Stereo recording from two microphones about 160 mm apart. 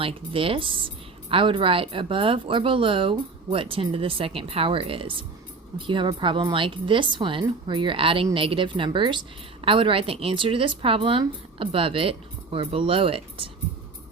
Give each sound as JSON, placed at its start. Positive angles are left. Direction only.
{"t": 0.0, "sound": "speech", "side_deg": -35}